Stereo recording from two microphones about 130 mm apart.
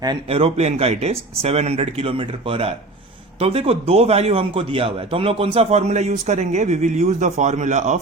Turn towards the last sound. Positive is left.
turn(degrees=-65)  # may be behind; listen again after turning